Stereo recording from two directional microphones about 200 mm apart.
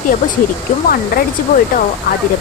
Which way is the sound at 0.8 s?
45° left (ahead or behind).